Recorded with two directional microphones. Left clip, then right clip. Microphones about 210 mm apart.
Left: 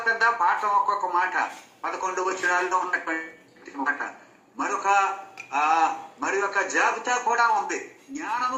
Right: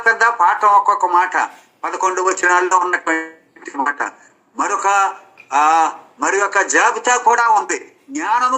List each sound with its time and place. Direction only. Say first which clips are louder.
0.0 s speech: right 9 dB; 45° right (ahead or behind)